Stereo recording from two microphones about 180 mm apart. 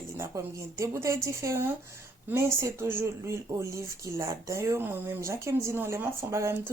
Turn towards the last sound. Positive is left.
turn(degrees=-15)  # may be behind; listen again after turning